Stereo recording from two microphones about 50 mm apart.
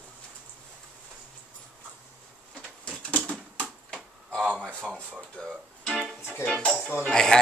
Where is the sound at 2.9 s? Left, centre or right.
Centre.